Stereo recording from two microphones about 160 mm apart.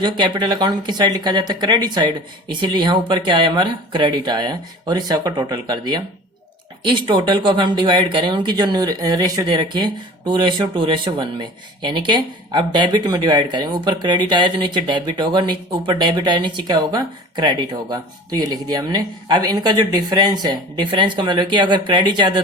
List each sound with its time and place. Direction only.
0.0 s speech: 30° right (ahead or behind)